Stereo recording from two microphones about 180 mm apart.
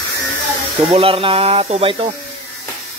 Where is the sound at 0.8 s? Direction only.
30° right (ahead or behind).